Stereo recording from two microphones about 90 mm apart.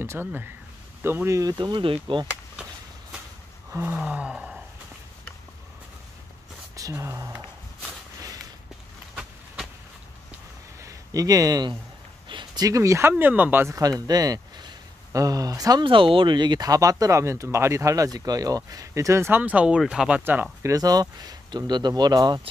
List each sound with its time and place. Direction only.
0.0 s speech: 25° right (ahead or behind)
1.4 s speech: 50° right (ahead or behind)
2.1 s speech: 70° right (ahead or behind)
3.7 s gasp: 20° right (ahead or behind)
6.7 s speech: 40° right (ahead or behind)
10.8 s a sound: 40° right (ahead or behind)
12.3 s a sound: 60° right (ahead or behind)
12.6 s speech: 35° right (ahead or behind)
13.1 s speech: 20° right (ahead or behind)
13.7 s speech: 40° right (ahead or behind)
15.8 s speech: 70° right (ahead or behind); by 19.4 s 30° right (ahead or behind)
19.4 s speech: 15° right (ahead or behind)
20.6 s speech: 45° right (ahead or behind)